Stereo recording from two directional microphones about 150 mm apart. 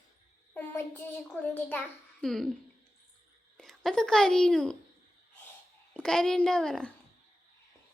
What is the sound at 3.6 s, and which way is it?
A child's voice, 5° left (ahead or behind).